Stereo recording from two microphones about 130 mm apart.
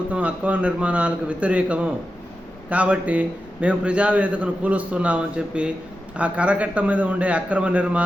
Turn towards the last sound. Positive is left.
turn(degrees=-10)  # may be behind; listen again after turning